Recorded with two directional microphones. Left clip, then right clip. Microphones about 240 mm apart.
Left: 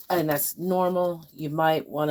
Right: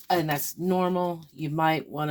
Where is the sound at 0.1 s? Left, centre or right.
Right.